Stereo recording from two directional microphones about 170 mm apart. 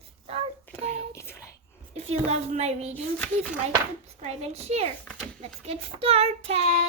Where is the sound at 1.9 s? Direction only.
40° right (ahead or behind).